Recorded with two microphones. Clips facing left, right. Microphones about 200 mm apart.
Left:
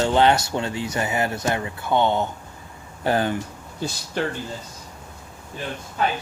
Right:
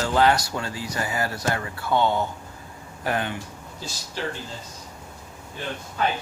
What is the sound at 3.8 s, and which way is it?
Speech, 55° left (ahead or behind).